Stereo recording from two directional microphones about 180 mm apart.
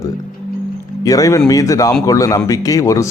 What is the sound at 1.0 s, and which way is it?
A man's voice, 20° left (ahead or behind).